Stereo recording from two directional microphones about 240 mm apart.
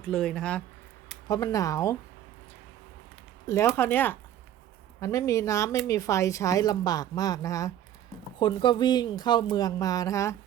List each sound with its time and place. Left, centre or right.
0.0 s speech: centre
1.3 s speech: centre
3.4 s speech: centre